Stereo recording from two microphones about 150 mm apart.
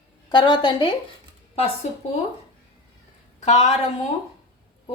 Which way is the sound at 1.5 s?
40° left (ahead or behind).